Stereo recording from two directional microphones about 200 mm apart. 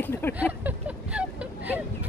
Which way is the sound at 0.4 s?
5° right (ahead or behind).